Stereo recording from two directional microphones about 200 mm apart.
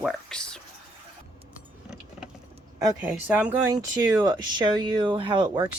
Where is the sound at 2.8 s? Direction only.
10° right (ahead or behind).